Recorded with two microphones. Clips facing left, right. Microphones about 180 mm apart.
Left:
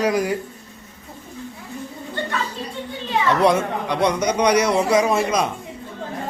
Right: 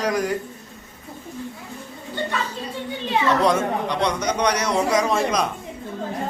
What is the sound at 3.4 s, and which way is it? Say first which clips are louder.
A man's voice: left 2 dB; 10° left (ahead or behind).